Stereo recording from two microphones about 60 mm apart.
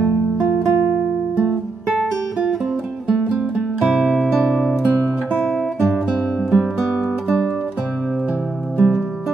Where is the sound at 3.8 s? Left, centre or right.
Centre.